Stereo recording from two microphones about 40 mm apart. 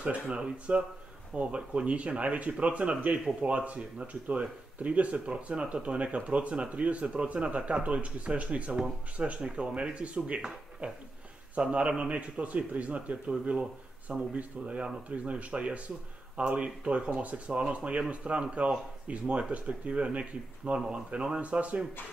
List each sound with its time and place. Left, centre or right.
0.0 s speech: right
21.4 s speech: right